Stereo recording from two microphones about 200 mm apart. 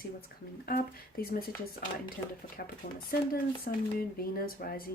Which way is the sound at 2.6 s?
50° left (ahead or behind).